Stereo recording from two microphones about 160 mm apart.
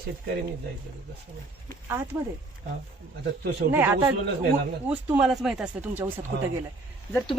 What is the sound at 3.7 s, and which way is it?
Speech, 15° right (ahead or behind).